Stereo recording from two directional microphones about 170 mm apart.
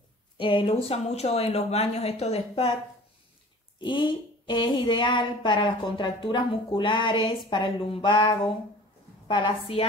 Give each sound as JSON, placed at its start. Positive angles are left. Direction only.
{"t": 0.4, "sound": "speech", "side_deg": 30}
{"t": 3.8, "sound": "speech", "side_deg": 30}